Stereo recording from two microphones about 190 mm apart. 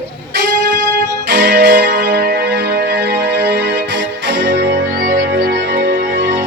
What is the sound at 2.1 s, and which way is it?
Music, 55° right (ahead or behind).